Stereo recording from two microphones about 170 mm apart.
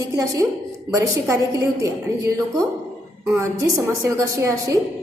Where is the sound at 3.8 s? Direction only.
15° right (ahead or behind).